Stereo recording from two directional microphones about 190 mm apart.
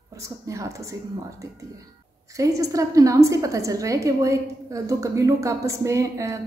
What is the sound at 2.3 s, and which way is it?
A woman's voice, 15° right (ahead or behind).